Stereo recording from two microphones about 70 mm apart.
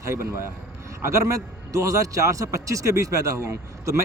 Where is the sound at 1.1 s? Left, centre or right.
Right.